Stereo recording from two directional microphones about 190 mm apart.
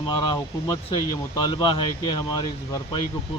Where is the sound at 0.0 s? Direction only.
25° left (ahead or behind).